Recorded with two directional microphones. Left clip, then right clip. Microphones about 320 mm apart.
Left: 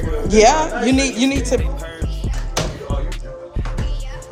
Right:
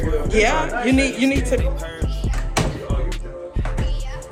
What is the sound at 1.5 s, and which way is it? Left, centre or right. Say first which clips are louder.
Speech: left 2 dB; centre.